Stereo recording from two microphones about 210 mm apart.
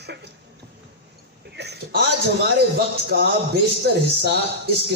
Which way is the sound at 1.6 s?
50° right (ahead or behind).